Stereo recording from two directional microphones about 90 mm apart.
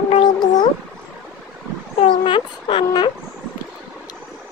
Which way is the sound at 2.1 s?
65° left (ahead or behind).